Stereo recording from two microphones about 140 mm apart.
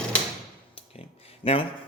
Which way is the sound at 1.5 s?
45° left (ahead or behind).